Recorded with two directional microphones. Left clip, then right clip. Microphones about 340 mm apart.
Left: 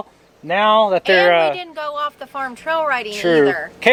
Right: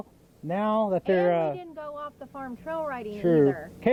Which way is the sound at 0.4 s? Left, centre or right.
Centre.